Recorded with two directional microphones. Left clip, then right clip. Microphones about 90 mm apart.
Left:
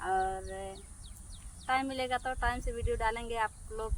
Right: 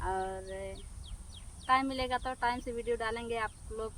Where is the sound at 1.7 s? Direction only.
35° right (ahead or behind).